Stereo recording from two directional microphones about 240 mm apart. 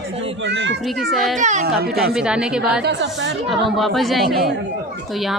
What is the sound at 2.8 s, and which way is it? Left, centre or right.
Speech, right.